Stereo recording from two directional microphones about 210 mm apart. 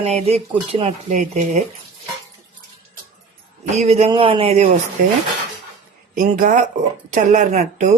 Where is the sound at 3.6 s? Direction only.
30° right (ahead or behind).